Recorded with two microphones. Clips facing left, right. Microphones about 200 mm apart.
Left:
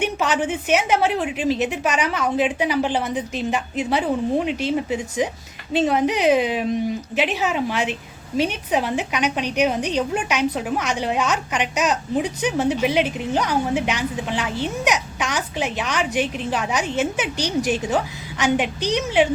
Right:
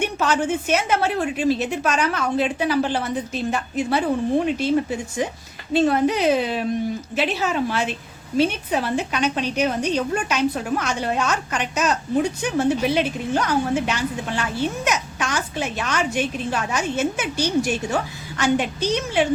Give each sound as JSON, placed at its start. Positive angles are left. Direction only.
{"t": 0.0, "sound": "a woman's voice", "side_deg": 15}